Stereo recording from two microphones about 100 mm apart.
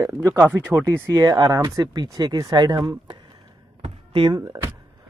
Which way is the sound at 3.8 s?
65° right (ahead or behind).